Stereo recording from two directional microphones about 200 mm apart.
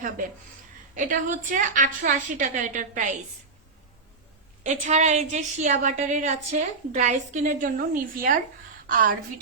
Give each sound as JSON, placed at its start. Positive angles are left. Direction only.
{"t": 0.9, "sound": "a woman's voice", "side_deg": -40}
{"t": 4.6, "sound": "a woman's voice", "side_deg": -35}